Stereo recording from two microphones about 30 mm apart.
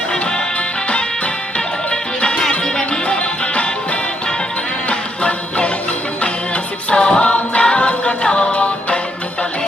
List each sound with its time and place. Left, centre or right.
1.5 s music: left
4.9 s music: left
6.9 s music: left
8.5 s music: left